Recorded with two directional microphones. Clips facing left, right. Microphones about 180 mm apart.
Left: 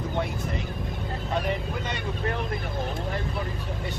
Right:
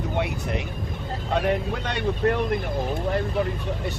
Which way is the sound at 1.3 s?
65° right (ahead or behind).